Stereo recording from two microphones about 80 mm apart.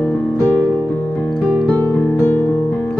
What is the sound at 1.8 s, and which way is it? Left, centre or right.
Music, left.